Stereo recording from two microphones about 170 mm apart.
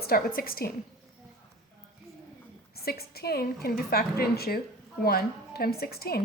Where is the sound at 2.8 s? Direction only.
65° left (ahead or behind).